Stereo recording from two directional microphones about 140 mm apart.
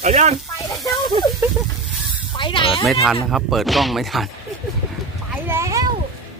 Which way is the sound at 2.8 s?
Centre (ahead or behind).